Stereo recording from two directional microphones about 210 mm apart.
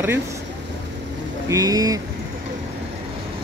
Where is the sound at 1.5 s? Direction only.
15° right (ahead or behind).